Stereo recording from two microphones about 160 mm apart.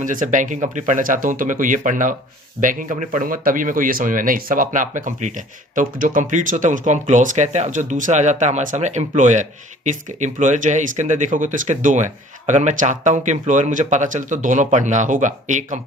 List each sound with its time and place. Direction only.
0.0 s speech: 55° right (ahead or behind)